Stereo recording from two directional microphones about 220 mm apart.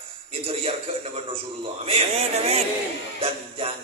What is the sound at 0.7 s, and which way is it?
Speech, 25° right (ahead or behind).